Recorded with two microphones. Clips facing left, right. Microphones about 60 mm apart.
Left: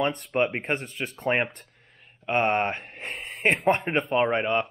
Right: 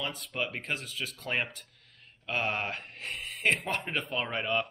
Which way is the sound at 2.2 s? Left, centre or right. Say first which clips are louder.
Left 8 dB; left.